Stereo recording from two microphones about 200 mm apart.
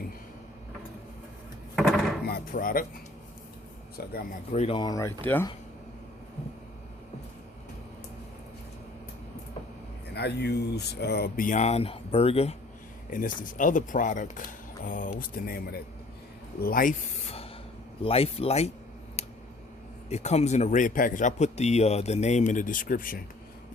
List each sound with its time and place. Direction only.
1.7 s a sound: centre (ahead or behind)
2.2 s music: 45° left (ahead or behind)
3.9 s speech: 50° left (ahead or behind)
4.5 s speech: 30° left (ahead or behind); by 5.5 s 10° left (ahead or behind)
10.2 s a man's voice: 55° left (ahead or behind); by 12.5 s 30° left (ahead or behind)
13.1 s a man's voice: 40° left (ahead or behind)
19.2 s a sound: 30° left (ahead or behind)
20.1 s a man's voice: 35° left (ahead or behind)